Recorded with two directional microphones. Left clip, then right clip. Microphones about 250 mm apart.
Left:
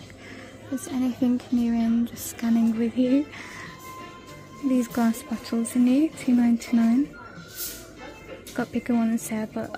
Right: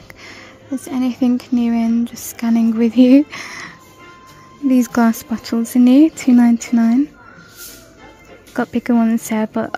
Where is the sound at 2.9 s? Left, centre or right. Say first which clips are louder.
Right 16 dB; right.